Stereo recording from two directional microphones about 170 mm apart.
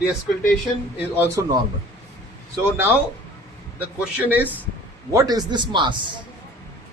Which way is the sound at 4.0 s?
10° right (ahead or behind).